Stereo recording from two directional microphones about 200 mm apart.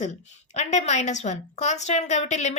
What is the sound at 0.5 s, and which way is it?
A woman's voice, 35° left (ahead or behind).